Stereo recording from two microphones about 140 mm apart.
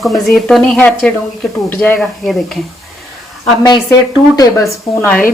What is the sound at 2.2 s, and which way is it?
Speech, centre (ahead or behind).